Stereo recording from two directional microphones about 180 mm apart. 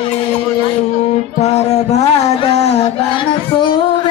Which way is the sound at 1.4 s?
40° left (ahead or behind).